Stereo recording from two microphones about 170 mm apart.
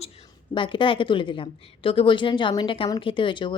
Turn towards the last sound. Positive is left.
turn(degrees=30)  # may be behind; listen again after turning